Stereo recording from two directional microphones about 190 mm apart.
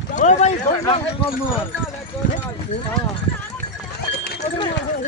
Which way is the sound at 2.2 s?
45° left (ahead or behind).